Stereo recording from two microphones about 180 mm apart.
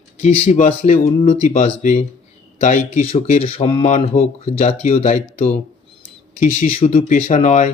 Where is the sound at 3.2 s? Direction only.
35° left (ahead or behind).